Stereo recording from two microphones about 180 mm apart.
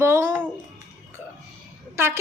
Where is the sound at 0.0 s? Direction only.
15° right (ahead or behind).